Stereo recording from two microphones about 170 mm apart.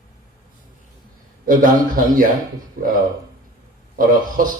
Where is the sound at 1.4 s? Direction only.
50° right (ahead or behind).